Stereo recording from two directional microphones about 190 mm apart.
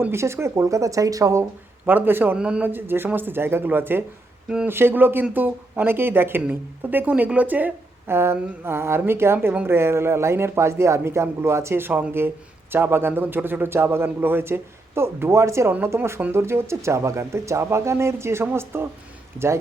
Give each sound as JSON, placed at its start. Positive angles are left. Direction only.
{"t": 0.0, "sound": "speech", "side_deg": -15}